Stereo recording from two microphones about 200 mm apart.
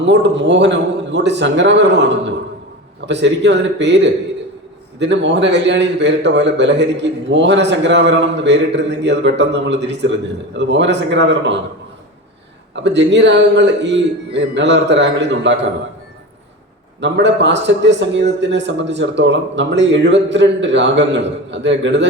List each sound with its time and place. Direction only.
0.0 s a man's voice: 60° right (ahead or behind)
12.7 s a man's voice: 60° right (ahead or behind)
17.0 s a man's voice: 60° right (ahead or behind)